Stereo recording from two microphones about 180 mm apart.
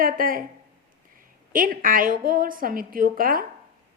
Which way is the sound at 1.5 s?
50° right (ahead or behind).